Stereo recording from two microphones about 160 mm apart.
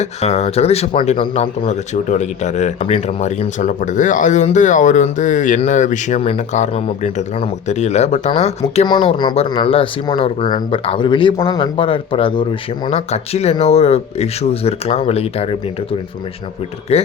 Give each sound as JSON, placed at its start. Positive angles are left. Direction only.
{"t": 0.0, "sound": "speech", "side_deg": 45}
{"t": 8.9, "sound": "speech", "side_deg": 30}
{"t": 12.9, "sound": "speech", "side_deg": 40}